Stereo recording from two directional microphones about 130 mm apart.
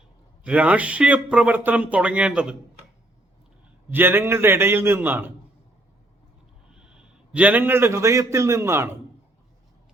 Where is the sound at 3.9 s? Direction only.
15° right (ahead or behind).